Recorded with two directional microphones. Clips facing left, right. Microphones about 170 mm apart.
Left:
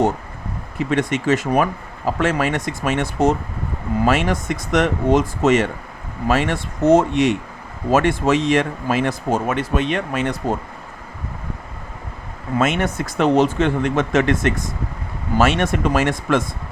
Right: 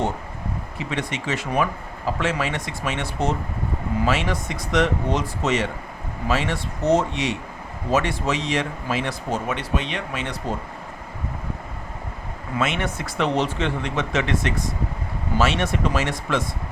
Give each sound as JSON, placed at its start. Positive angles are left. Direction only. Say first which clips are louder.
{"t": 0.8, "sound": "speech", "louder": "left 9 dB", "side_deg": 50}
{"t": 12.5, "sound": "speech", "louder": "left 5 dB", "side_deg": 45}